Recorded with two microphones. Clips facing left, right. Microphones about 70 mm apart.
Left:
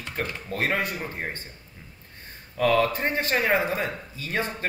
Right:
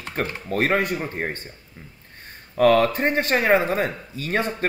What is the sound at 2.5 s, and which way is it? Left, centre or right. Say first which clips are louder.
Speech: right 5 dB; right.